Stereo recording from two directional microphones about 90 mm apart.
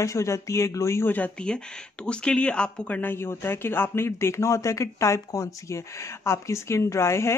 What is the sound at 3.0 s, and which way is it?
Speech, 25° left (ahead or behind).